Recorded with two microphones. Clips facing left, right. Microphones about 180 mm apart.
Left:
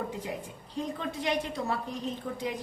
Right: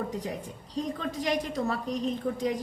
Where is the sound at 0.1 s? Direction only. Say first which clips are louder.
Right 2 dB; 40° right (ahead or behind).